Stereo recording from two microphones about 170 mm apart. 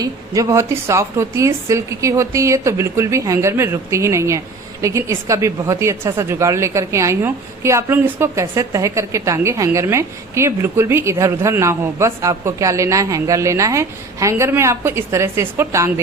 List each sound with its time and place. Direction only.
0.0 s a woman's voice: 15° right (ahead or behind)